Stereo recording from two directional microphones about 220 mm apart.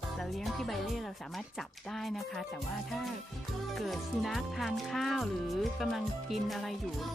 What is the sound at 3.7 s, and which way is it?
Speech, centre (ahead or behind).